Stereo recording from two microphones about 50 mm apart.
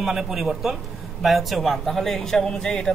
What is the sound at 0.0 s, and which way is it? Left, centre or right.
Speech, centre.